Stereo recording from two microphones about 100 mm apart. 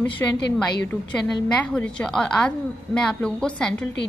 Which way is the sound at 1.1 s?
10° left (ahead or behind).